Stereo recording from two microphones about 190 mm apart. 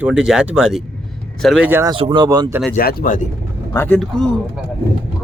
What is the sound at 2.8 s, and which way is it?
Speech, 50° left (ahead or behind).